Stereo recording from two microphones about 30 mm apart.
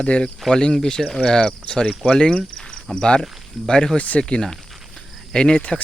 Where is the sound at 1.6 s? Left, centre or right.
Left.